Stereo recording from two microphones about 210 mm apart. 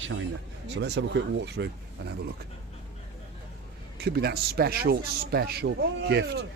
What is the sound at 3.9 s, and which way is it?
A man's voice, 50° right (ahead or behind).